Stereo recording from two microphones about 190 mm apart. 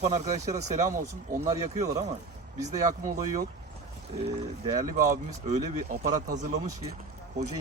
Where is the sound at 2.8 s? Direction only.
40° right (ahead or behind).